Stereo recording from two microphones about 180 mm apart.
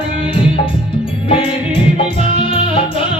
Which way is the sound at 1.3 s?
30° left (ahead or behind).